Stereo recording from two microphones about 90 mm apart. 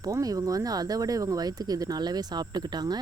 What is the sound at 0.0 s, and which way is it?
Speech, 40° right (ahead or behind).